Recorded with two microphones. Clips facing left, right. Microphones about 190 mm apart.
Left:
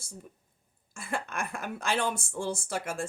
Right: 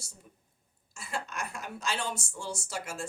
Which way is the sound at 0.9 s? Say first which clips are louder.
Left 3 dB; 55° left (ahead or behind).